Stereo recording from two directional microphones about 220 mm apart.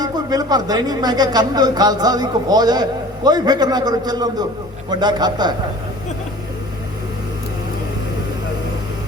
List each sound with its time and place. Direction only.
0.0 s a man's voice: 20° right (ahead or behind)